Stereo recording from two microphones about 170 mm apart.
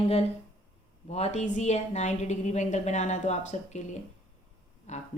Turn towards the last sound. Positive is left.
turn(degrees=45)  # may be behind; listen again after turning